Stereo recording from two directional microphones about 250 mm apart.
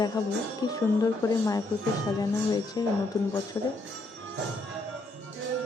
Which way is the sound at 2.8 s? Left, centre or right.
Centre.